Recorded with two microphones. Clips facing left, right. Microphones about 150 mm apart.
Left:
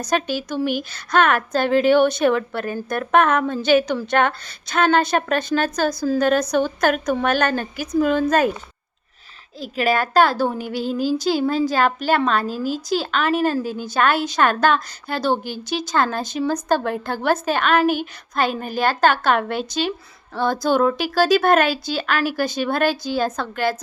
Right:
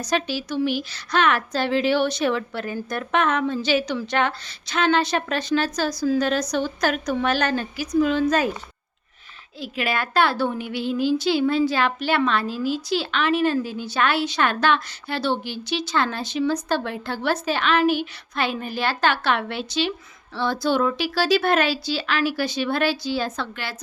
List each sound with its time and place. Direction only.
0.0 s a woman's voice: 50° left (ahead or behind)
9.6 s a woman's voice: 40° left (ahead or behind)